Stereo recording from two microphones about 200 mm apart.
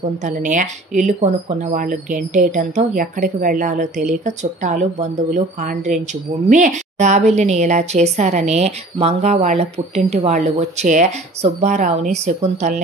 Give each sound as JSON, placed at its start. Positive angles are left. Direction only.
{"t": 0.2, "sound": "a woman's voice", "side_deg": -40}